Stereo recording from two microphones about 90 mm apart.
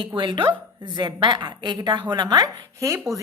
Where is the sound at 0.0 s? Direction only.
65° right (ahead or behind).